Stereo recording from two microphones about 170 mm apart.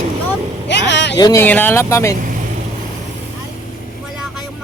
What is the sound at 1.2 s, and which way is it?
Speech, 15° left (ahead or behind).